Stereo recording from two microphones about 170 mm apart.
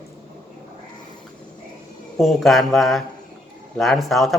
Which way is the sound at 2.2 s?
Centre (ahead or behind).